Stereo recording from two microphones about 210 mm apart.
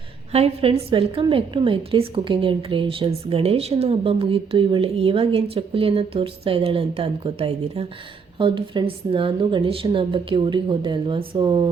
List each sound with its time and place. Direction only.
0.3 s a woman's voice: 30° right (ahead or behind)